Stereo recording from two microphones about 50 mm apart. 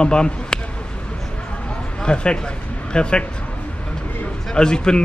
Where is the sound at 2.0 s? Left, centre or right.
Centre.